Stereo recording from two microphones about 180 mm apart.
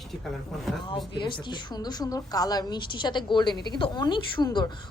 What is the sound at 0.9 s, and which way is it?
A woman's voice, 25° left (ahead or behind).